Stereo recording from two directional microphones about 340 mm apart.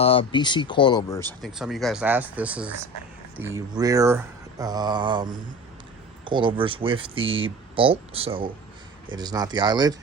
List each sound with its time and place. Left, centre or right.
0.0 s speech: centre
1.3 s speech: centre